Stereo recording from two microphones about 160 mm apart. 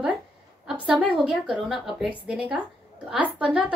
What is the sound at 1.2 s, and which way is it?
A woman's voice, 5° right (ahead or behind).